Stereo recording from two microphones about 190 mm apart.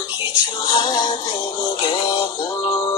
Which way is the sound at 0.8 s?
20° left (ahead or behind).